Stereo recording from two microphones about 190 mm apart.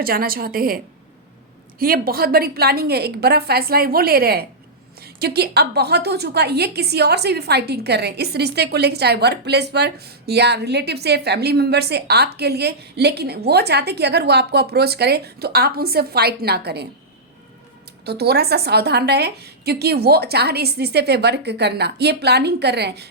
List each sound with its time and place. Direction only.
0.0 s a woman's voice: 50° right (ahead or behind)
1.8 s a woman's voice: 50° right (ahead or behind)
18.0 s a woman's voice: 55° right (ahead or behind)